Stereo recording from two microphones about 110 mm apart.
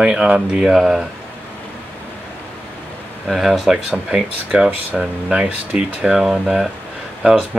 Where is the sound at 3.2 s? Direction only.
Centre (ahead or behind).